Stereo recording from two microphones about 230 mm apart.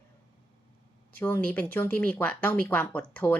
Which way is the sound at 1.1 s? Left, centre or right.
Centre.